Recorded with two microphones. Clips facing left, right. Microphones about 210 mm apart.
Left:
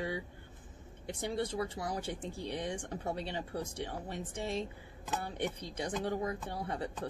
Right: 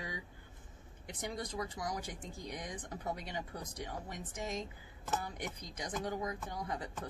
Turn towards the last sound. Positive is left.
turn(degrees=30)  # may be behind; listen again after turning